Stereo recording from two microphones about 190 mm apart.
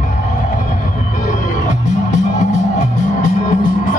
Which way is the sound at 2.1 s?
40° left (ahead or behind).